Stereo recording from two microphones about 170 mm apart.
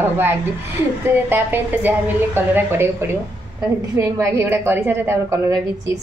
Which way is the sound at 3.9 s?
15° right (ahead or behind).